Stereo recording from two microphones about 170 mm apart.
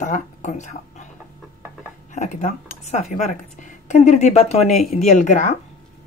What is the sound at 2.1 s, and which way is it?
Speech, 45° left (ahead or behind).